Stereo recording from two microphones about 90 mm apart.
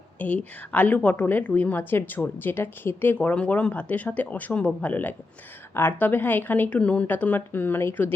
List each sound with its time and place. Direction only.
0.2 s a woman's voice: 20° left (ahead or behind)